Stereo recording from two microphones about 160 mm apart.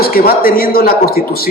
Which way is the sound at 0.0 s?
70° left (ahead or behind).